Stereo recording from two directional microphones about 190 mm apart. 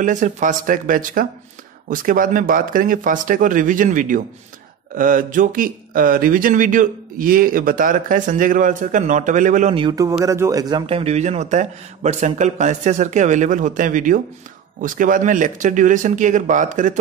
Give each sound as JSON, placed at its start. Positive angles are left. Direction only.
{"t": 0.0, "sound": "speech", "side_deg": -45}
{"t": 9.8, "sound": "a man's voice", "side_deg": -20}